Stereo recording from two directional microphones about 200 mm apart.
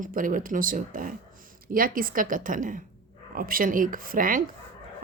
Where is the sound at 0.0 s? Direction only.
45° right (ahead or behind).